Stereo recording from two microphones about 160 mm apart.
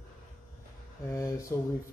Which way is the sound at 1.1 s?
20° left (ahead or behind).